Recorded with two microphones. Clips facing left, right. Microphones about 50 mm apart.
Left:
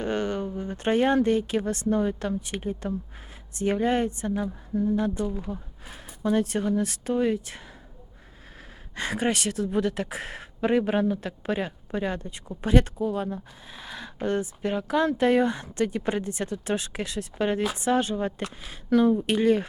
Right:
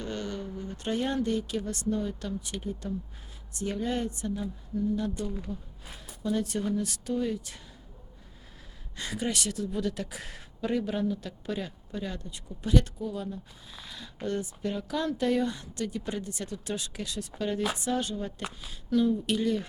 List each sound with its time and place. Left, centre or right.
0.0 s a woman's voice: left
4.4 s a woman's voice: left
9.0 s a woman's voice: left